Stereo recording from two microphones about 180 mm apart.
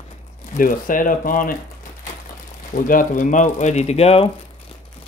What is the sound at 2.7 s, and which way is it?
Speech, 50° left (ahead or behind).